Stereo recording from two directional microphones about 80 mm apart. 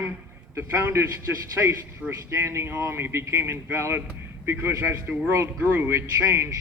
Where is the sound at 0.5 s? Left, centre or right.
Right.